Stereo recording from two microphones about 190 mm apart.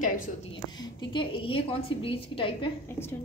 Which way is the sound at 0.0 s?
35° left (ahead or behind).